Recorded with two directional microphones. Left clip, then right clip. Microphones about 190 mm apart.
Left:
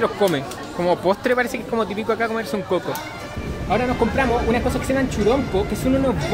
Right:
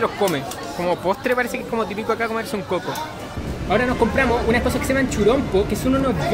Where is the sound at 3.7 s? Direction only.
15° right (ahead or behind).